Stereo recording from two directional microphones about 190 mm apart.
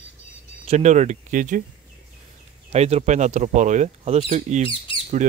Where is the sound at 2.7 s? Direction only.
35° right (ahead or behind).